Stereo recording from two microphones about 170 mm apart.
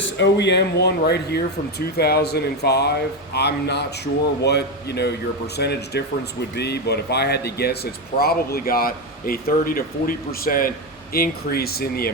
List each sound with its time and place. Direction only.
0.2 s a man's voice: 90° left; by 12.1 s 65° left (ahead or behind)